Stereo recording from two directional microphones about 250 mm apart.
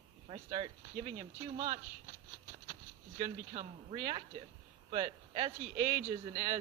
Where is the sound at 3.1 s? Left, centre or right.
Right.